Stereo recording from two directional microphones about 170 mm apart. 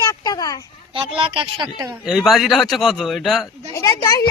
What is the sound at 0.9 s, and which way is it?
Speech, 30° right (ahead or behind).